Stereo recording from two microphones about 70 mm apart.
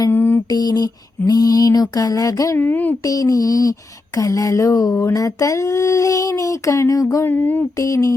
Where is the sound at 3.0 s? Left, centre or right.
Left.